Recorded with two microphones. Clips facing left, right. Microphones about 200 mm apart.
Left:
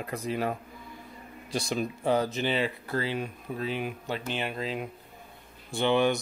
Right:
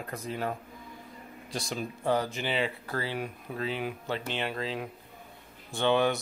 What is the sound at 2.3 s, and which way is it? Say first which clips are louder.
Speech: left 3 dB; 15° right (ahead or behind).